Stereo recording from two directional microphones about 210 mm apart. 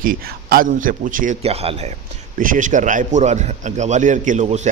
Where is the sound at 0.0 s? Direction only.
45° right (ahead or behind).